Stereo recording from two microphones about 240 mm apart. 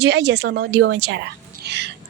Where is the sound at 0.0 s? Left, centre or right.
Right.